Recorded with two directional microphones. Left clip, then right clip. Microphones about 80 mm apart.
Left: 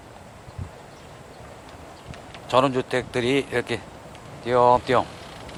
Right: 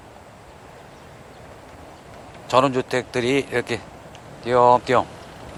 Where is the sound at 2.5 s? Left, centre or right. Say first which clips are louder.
Right 2 dB; right.